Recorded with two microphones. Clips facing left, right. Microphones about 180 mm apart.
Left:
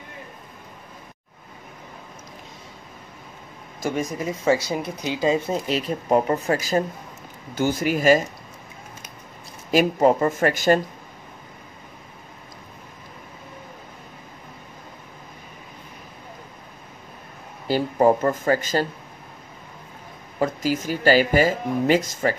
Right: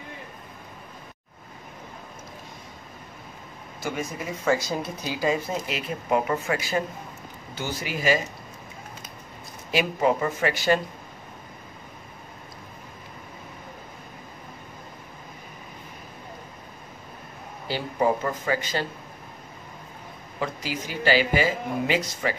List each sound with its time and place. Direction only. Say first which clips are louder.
3.8 s speech: left 5 dB; 35° left (ahead or behind)
4.6 s speech: left 3 dB; 20° left (ahead or behind); by 8.2 s 45° left (ahead or behind)
9.7 s speech: left 5 dB; 45° left (ahead or behind)
17.6 s speech: left 6 dB; 45° left (ahead or behind)
20.3 s speech: left 8 dB; 45° left (ahead or behind)